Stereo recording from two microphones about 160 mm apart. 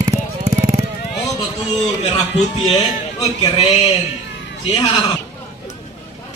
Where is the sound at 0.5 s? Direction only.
20° right (ahead or behind).